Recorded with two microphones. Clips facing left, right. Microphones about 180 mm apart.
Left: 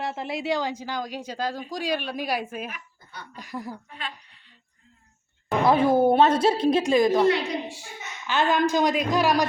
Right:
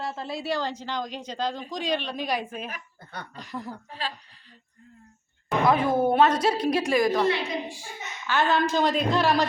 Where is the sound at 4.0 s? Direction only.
30° right (ahead or behind).